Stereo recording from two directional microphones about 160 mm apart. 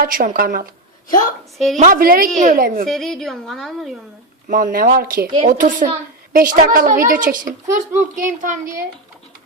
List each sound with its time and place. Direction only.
0.0 s a child's voice: 60° right (ahead or behind)
1.0 s a woman's voice: 55° left (ahead or behind)
1.7 s a child's voice: 55° right (ahead or behind)
2.8 s a woman's voice: 5° left (ahead or behind)
4.4 s a child's voice: 60° right (ahead or behind)